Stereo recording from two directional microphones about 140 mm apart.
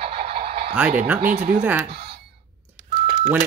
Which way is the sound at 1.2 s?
65° right (ahead or behind).